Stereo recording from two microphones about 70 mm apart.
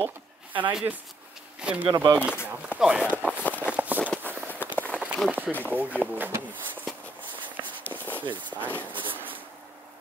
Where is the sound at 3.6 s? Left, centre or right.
Right.